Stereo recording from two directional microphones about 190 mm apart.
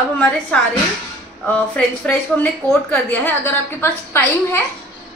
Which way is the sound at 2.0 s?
10° left (ahead or behind).